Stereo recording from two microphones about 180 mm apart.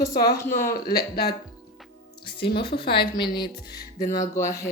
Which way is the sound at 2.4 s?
65° left (ahead or behind).